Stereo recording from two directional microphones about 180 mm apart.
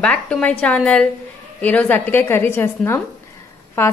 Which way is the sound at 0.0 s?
5° left (ahead or behind).